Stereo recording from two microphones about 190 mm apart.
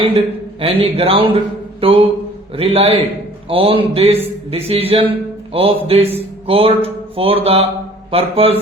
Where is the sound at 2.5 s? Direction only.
30° right (ahead or behind).